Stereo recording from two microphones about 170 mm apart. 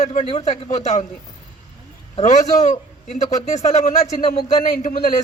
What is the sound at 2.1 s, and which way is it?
A man's voice, 45° left (ahead or behind).